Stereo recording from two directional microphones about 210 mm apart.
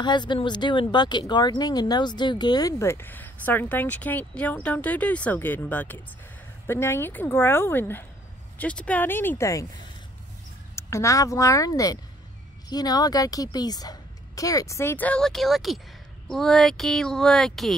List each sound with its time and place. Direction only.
0.0 s speech: 20° left (ahead or behind)
10.8 s speech: 15° left (ahead or behind)